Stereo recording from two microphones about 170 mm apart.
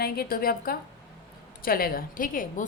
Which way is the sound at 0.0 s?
60° left (ahead or behind).